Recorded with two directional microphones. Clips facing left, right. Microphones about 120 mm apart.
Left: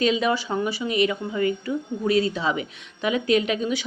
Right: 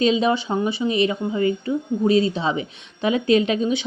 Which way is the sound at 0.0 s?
25° right (ahead or behind).